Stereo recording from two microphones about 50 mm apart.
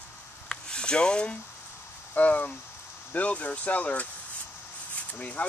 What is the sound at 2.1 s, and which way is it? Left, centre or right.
Speech, left.